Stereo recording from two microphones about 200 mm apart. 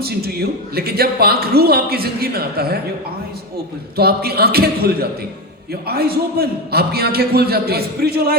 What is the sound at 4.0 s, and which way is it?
A man's voice, 50° right (ahead or behind).